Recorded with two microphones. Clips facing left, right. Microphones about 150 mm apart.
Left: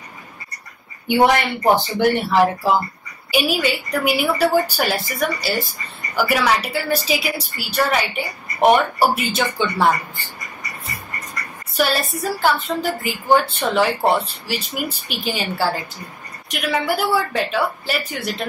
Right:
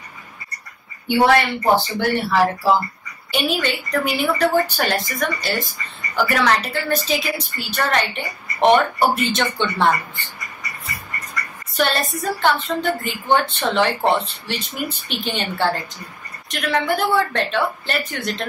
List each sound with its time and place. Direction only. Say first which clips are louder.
1.0 s a woman's voice: even; 15° left (ahead or behind)
3.3 s a woman's voice: left 2 dB; 10° left (ahead or behind)
11.7 s a woman's voice: even; 10° left (ahead or behind)